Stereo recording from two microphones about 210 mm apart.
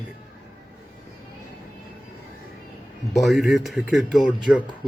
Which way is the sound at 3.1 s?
Centre (ahead or behind).